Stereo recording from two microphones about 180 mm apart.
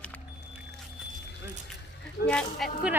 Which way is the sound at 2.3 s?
5° left (ahead or behind).